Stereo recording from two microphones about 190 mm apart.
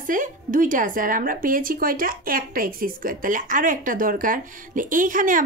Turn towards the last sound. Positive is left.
turn(degrees=-45)  # may be behind; listen again after turning